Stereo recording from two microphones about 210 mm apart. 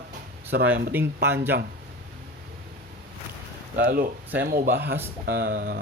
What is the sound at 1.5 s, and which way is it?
Speech, 55° right (ahead or behind).